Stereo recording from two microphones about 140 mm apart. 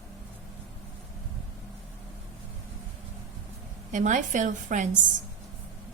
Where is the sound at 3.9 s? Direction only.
65° right (ahead or behind).